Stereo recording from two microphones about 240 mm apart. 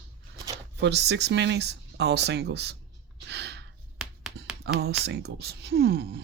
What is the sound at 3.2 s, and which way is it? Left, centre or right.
Gasp, right.